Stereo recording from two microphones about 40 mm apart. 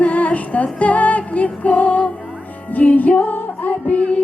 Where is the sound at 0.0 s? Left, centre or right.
Left.